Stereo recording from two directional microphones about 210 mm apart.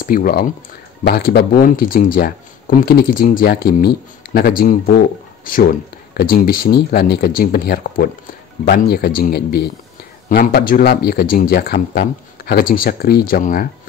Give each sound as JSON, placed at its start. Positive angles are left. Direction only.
{"t": 0.0, "sound": "speech", "side_deg": 45}